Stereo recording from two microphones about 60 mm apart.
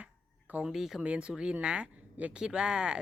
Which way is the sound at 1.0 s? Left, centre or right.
Centre.